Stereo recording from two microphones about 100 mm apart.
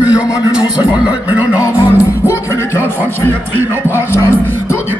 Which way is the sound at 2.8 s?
20° right (ahead or behind).